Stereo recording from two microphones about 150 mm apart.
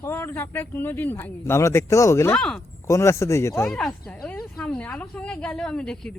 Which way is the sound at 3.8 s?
5° left (ahead or behind).